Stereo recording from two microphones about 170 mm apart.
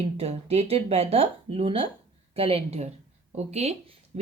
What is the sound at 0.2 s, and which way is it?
Speech, 35° right (ahead or behind).